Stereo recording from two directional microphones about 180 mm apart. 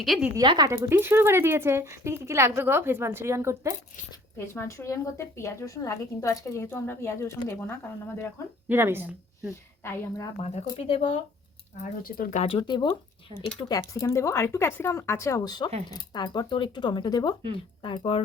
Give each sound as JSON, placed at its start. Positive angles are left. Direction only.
{"t": 0.0, "sound": "a woman's voice", "side_deg": 0}
{"t": 0.3, "sound": "speech", "side_deg": -20}
{"t": 4.4, "sound": "a woman's voice", "side_deg": 15}
{"t": 8.7, "sound": "speech", "side_deg": -10}
{"t": 9.8, "sound": "a woman's voice", "side_deg": 15}
{"t": 10.4, "sound": "speech", "side_deg": 35}
{"t": 11.8, "sound": "speech", "side_deg": 50}
{"t": 12.5, "sound": "a woman's voice", "side_deg": 25}